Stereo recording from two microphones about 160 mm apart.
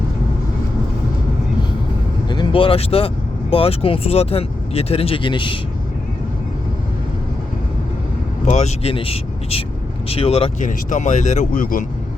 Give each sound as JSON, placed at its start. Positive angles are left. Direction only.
{"t": 2.2, "sound": "speech", "side_deg": 25}
{"t": 8.4, "sound": "speech", "side_deg": 45}
{"t": 10.7, "sound": "speech", "side_deg": 50}